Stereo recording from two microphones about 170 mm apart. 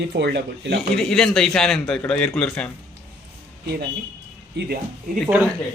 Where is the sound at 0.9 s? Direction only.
5° left (ahead or behind).